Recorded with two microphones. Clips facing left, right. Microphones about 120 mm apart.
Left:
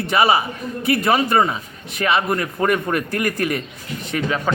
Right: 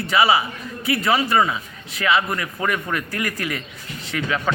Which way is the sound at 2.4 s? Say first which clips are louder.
Left 5 dB; 40° left (ahead or behind).